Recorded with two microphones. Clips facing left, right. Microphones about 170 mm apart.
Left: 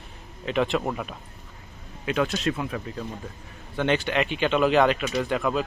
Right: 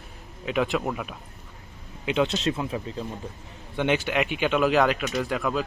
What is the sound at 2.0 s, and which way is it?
Speech, 20° right (ahead or behind).